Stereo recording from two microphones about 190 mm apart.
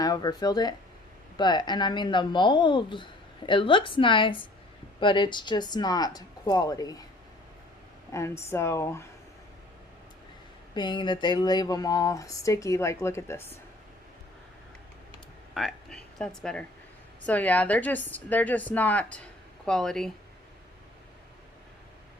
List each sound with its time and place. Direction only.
0.0 s speech: 20° left (ahead or behind)
8.1 s a woman's voice: 15° left (ahead or behind)
10.8 s speech: 25° left (ahead or behind)
15.5 s a woman's voice: centre (ahead or behind)